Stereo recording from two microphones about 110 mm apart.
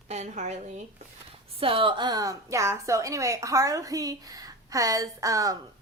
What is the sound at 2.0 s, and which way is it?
A woman's voice, 35° right (ahead or behind).